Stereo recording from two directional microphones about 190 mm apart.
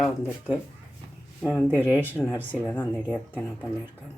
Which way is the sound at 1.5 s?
10° right (ahead or behind).